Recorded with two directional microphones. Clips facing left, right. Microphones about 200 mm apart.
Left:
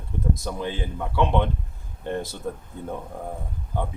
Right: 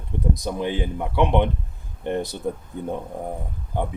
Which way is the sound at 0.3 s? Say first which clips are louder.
Right 4 dB; 15° right (ahead or behind).